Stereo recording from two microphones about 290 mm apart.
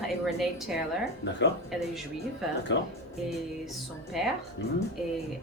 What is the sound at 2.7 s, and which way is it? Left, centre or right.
Speech, left.